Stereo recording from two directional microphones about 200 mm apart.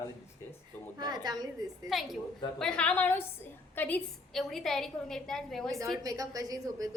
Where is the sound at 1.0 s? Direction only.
20° right (ahead or behind).